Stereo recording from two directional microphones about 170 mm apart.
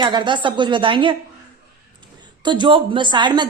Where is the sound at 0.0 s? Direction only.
25° right (ahead or behind).